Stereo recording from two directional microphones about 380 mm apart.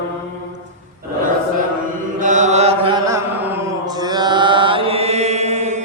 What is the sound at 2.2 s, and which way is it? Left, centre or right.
Mantra, centre.